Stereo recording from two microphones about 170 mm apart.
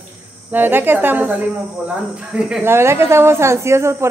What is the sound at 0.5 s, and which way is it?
Speech, 10° right (ahead or behind).